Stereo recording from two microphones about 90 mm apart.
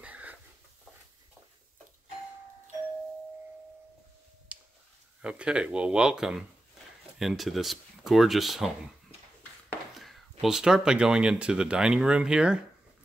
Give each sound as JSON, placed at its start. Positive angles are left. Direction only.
{"t": 0.0, "sound": "chicken", "side_deg": -15}
{"t": 4.5, "sound": "a sound", "side_deg": -15}
{"t": 5.2, "sound": "speech", "side_deg": -10}
{"t": 9.9, "sound": "speech", "side_deg": 0}